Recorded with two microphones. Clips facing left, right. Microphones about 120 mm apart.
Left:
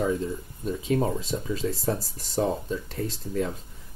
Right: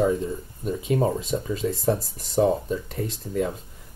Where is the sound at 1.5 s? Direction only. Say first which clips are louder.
Right 4 dB; centre (ahead or behind).